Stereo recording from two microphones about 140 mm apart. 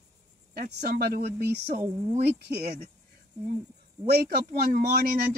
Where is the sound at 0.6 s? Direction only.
90° right.